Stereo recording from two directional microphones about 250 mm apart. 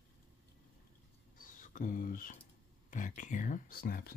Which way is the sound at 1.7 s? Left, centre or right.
Left.